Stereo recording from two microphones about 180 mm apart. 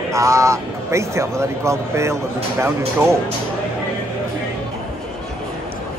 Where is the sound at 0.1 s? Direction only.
15° right (ahead or behind).